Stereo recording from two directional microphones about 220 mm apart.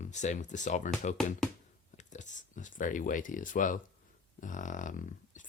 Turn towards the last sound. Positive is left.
turn(degrees=35)  # may be behind; listen again after turning